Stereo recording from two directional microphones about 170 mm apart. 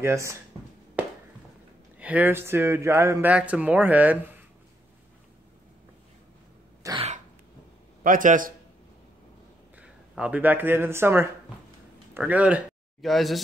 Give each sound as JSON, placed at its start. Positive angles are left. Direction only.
{"t": 0.0, "sound": "speech", "side_deg": -15}
{"t": 1.0, "sound": "a sound", "side_deg": -10}
{"t": 2.0, "sound": "speech", "side_deg": -10}
{"t": 6.8, "sound": "cough", "side_deg": -20}
{"t": 8.0, "sound": "a man's voice", "side_deg": -50}
{"t": 9.8, "sound": "speech", "side_deg": -5}